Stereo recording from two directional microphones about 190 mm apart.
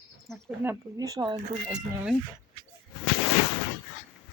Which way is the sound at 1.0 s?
20° right (ahead or behind).